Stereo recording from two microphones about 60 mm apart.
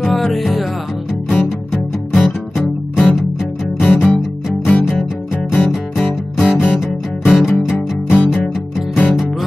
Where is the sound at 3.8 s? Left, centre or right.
Left.